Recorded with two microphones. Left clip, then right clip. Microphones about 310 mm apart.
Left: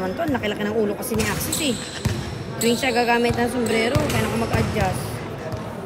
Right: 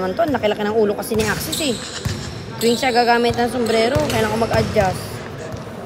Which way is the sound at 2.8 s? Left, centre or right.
Right.